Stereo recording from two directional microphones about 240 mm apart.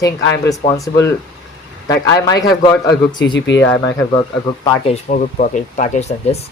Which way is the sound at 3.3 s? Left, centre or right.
Left.